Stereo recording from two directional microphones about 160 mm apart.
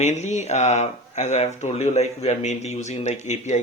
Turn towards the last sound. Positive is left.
turn(degrees=45)  # may be behind; listen again after turning